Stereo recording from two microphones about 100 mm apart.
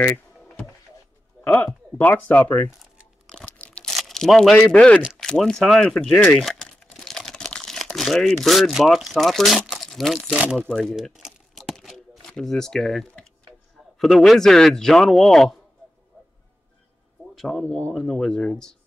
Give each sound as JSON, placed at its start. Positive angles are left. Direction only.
{"t": 1.4, "sound": "a man's voice", "side_deg": 20}
{"t": 3.4, "sound": "tearing", "side_deg": 15}
{"t": 3.9, "sound": "speech", "side_deg": 5}
{"t": 6.3, "sound": "crumpling", "side_deg": 5}
{"t": 10.4, "sound": "speech", "side_deg": -15}
{"t": 10.7, "sound": "crumpling", "side_deg": 5}
{"t": 12.2, "sound": "a man's voice", "side_deg": 5}
{"t": 16.1, "sound": "music", "side_deg": 10}
{"t": 17.5, "sound": "speech", "side_deg": 10}